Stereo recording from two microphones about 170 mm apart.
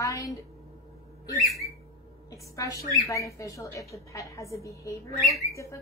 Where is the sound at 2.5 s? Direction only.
20° left (ahead or behind).